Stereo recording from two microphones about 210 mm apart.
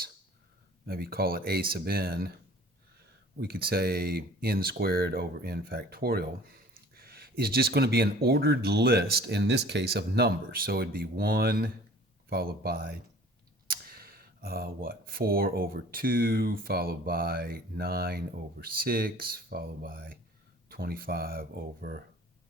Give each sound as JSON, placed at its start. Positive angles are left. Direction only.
{"t": 0.9, "sound": "speech", "side_deg": -45}
{"t": 3.4, "sound": "speech", "side_deg": -45}